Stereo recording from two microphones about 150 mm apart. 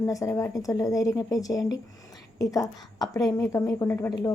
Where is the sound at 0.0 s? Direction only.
20° left (ahead or behind).